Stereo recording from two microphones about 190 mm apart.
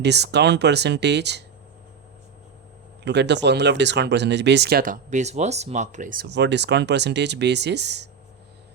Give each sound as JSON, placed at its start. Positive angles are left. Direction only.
{"t": 0.0, "sound": "speech", "side_deg": -60}
{"t": 3.0, "sound": "speech", "side_deg": -65}
{"t": 6.2, "sound": "speech", "side_deg": -65}